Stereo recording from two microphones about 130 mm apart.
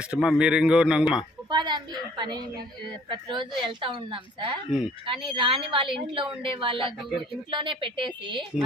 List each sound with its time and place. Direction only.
0.0 s a man's voice: 5° right (ahead or behind)
1.5 s a woman's voice: 35° right (ahead or behind)